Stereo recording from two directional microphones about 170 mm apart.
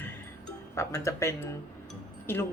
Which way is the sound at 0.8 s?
15° left (ahead or behind).